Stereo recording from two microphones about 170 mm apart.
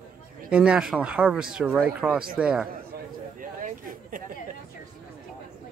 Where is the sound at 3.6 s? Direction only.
55° right (ahead or behind).